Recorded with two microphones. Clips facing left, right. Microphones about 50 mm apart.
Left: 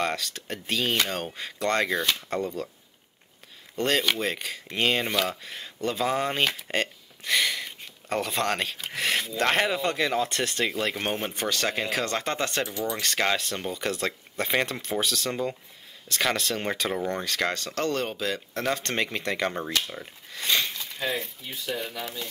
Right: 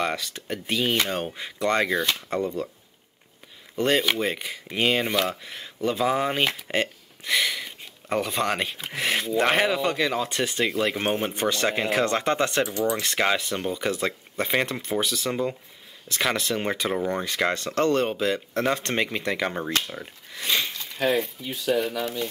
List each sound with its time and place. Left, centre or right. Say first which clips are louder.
0.0 s speech: right 1 dB; centre
3.7 s speech: right 2 dB; centre
11.3 s speech: right 3 dB; right
17.6 s speech: right 5 dB; right; by 19.7 s centre
19.9 s a sound: right 2 dB; centre
21.1 s speech: right 7 dB; centre
21.5 s speech: right 8 dB; right